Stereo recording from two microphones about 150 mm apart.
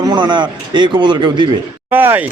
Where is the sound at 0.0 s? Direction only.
30° right (ahead or behind).